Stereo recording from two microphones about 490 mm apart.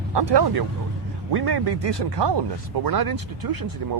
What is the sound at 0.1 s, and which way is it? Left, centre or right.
Speech, right.